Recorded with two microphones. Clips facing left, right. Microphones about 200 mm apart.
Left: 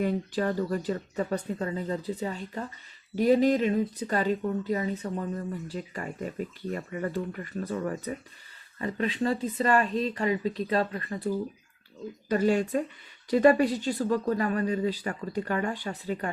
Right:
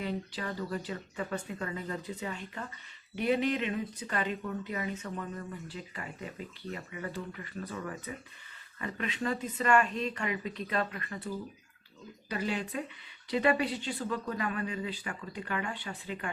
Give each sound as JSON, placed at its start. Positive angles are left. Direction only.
{"t": 0.0, "sound": "speech", "side_deg": 45}
{"t": 5.6, "sound": "speech", "side_deg": 45}
{"t": 12.3, "sound": "speech", "side_deg": 45}